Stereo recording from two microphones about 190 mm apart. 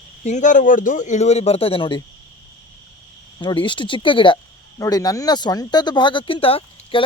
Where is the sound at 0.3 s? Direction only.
40° left (ahead or behind).